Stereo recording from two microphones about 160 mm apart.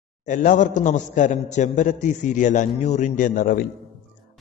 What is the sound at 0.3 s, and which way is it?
A man's voice, 50° left (ahead or behind).